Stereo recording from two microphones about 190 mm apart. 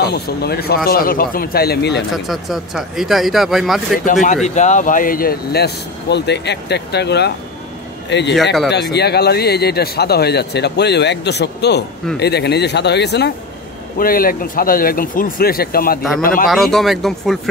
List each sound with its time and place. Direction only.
0.0 s speech: 55° left (ahead or behind)
2.1 s speech: centre (ahead or behind)
4.0 s speech: 45° left (ahead or behind); by 13.3 s 65° left (ahead or behind)
13.9 s speech: 50° left (ahead or behind)
16.4 s speech: centre (ahead or behind)